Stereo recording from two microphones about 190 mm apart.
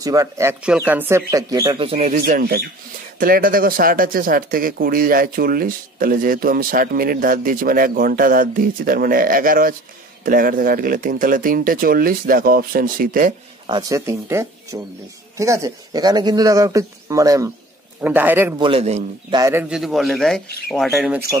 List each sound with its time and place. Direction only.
0.0 s speech: 20° right (ahead or behind); by 2.1 s 35° right (ahead or behind)
2.1 s speech: 50° right (ahead or behind)
13.7 s speech: 20° right (ahead or behind)
18.6 s a man's voice: 30° right (ahead or behind)
19.3 s speech: 15° right (ahead or behind)
19.7 s speech: centre (ahead or behind)